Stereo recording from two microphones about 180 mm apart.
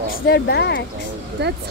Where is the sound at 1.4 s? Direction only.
70° right (ahead or behind).